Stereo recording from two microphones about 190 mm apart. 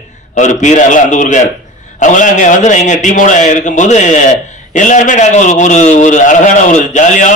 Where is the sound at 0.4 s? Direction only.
40° left (ahead or behind).